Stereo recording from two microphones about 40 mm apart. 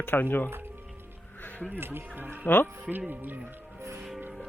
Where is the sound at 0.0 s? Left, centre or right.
Left.